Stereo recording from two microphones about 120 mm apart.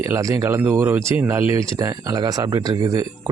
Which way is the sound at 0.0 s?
25° right (ahead or behind).